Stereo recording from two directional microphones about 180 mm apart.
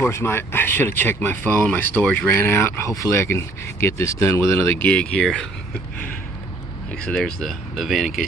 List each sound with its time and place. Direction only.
0.0 s speech: 15° left (ahead or behind)
6.9 s speech: 5° left (ahead or behind)